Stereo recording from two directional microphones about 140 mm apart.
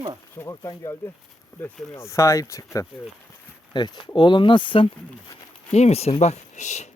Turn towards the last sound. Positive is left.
turn(degrees=55)  # may be behind; listen again after turning